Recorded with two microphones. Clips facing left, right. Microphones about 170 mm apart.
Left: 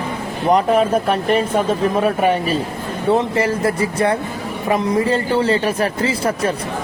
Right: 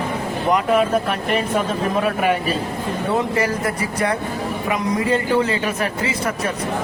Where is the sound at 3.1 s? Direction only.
25° left (ahead or behind).